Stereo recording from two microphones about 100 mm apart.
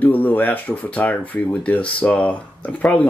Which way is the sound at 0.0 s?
15° left (ahead or behind).